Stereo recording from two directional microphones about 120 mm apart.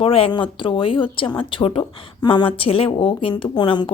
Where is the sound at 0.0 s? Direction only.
50° left (ahead or behind).